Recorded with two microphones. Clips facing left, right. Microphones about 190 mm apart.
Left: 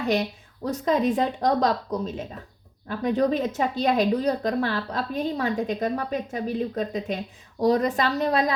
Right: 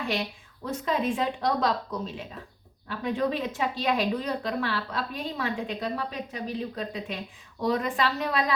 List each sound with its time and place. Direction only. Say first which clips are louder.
0.0 s a woman's voice: left 6 dB; 40° left (ahead or behind)